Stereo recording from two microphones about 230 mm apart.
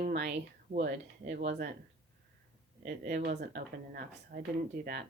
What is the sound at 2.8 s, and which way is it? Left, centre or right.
Speech, right.